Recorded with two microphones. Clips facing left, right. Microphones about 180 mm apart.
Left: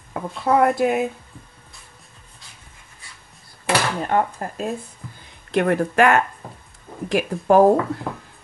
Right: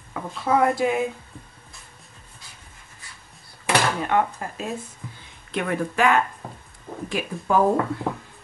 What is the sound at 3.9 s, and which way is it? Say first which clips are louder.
Speech: left 1 dB; 40° left (ahead or behind).